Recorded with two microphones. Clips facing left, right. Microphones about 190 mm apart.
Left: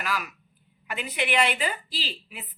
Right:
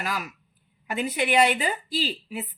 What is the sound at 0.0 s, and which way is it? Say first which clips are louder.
Speech: even; 35° right (ahead or behind).